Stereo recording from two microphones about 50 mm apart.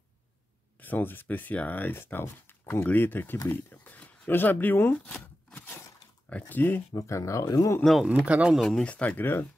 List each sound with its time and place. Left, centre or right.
0.7 s speech: left
6.5 s speech: left
6.9 s speech: left
8.3 s speech: right
8.5 s speech: centre
8.8 s speech: left
9.2 s speech: left